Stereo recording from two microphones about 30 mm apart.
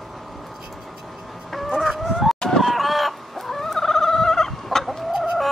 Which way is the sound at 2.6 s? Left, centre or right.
Centre.